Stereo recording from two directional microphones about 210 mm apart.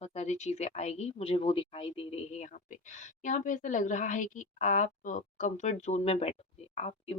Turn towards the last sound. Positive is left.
turn(degrees=30)  # may be behind; listen again after turning